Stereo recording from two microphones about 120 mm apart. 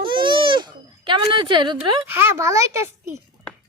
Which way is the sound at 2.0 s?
20° right (ahead or behind).